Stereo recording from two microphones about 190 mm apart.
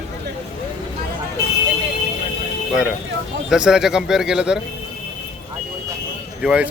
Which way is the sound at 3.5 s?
5° right (ahead or behind).